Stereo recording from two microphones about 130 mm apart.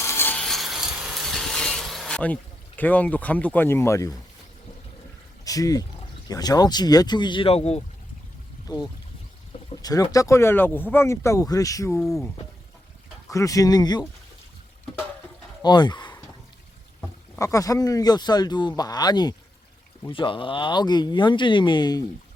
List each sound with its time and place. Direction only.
0.0 s rub: 20° left (ahead or behind)
0.4 s a sound: centre (ahead or behind); by 4.2 s 25° left (ahead or behind)
5.5 s speech: 25° left (ahead or behind); by 7.8 s 50° left (ahead or behind)
8.6 s speech: 30° left (ahead or behind)
11.9 s speech: centre (ahead or behind)
13.3 s speech: 25° left (ahead or behind)
15.6 s speech: 35° left (ahead or behind)
17.3 s speech: 25° left (ahead or behind)